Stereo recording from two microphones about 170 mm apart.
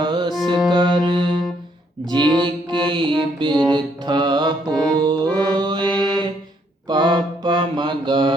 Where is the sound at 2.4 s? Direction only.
30° right (ahead or behind).